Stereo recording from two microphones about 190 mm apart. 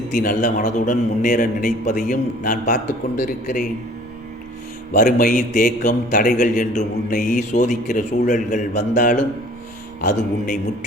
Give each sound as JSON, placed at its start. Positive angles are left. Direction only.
{"t": 0.1, "sound": "a man's voice", "side_deg": 45}
{"t": 4.9, "sound": "a man's voice", "side_deg": 45}